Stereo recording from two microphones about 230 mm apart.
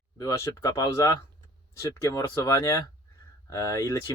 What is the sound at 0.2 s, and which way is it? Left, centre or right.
Speech, centre.